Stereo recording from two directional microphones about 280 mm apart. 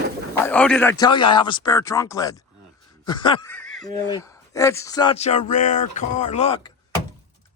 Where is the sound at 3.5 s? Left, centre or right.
Centre.